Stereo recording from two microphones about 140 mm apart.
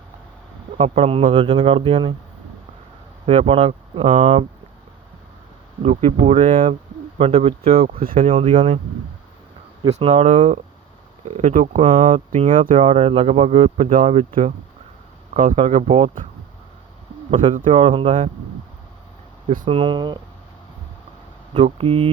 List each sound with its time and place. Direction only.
0.8 s speech: 45° right (ahead or behind)
3.2 s speech: 45° right (ahead or behind)
5.8 s speech: 45° right (ahead or behind)
9.8 s speech: 50° right (ahead or behind); by 11.8 s 70° right (ahead or behind)
12.1 s speech: 45° right (ahead or behind)
13.9 s speech: 60° right (ahead or behind)
15.3 s speech: 60° right (ahead or behind)
15.5 s speech: 45° right (ahead or behind)
17.7 s speech: 40° right (ahead or behind)
19.6 s speech: 35° right (ahead or behind)
21.5 s speech: 40° right (ahead or behind)